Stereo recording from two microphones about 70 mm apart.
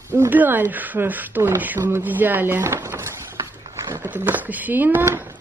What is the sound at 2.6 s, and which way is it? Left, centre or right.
Speech, right.